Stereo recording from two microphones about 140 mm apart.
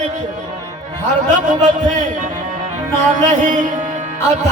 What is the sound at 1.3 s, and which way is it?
Speech, 60° right (ahead or behind).